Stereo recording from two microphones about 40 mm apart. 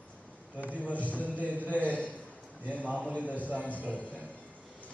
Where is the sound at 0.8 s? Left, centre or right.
Left.